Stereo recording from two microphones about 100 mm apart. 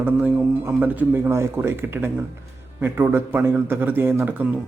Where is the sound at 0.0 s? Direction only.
20° right (ahead or behind).